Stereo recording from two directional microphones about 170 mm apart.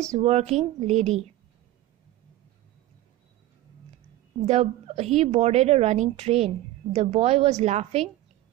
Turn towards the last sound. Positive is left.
turn(degrees=-40)  # may be behind; listen again after turning